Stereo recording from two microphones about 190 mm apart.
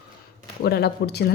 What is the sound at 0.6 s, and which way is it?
Speech, 60° left (ahead or behind).